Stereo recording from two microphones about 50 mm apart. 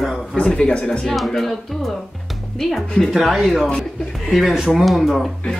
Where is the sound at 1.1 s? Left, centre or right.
Centre.